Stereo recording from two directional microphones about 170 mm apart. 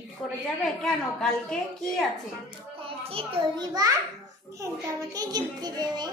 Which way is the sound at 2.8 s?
35° right (ahead or behind).